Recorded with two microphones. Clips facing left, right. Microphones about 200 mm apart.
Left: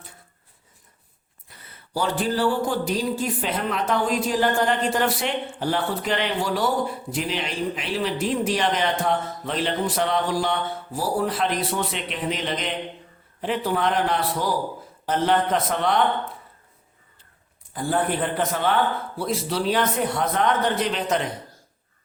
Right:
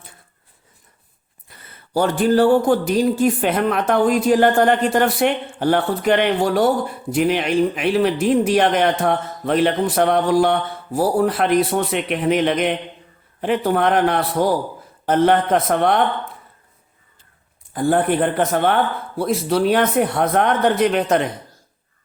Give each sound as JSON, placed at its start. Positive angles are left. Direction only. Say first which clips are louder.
{"t": 1.5, "sound": "speech", "louder": "right 3 dB", "side_deg": -55}
{"t": 17.7, "sound": "speech", "louder": "right 7 dB", "side_deg": -55}